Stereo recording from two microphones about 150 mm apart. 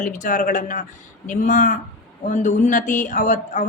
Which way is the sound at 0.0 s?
55° left (ahead or behind).